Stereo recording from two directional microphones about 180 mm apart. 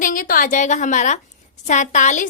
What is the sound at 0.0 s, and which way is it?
A woman's voice, 50° left (ahead or behind).